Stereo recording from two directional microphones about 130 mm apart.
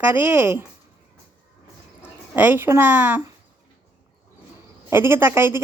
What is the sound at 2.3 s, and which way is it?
Speech, 15° right (ahead or behind).